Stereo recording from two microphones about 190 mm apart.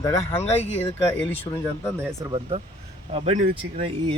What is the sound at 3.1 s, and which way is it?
Speech, 30° right (ahead or behind).